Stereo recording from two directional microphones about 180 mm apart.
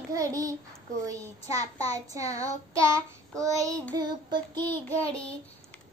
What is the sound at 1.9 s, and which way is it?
A child's voice, 20° right (ahead or behind).